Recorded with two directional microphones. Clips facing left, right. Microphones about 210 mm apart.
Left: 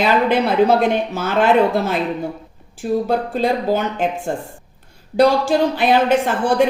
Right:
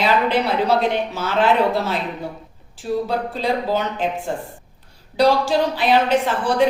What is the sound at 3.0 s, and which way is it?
Speech, 50° left (ahead or behind).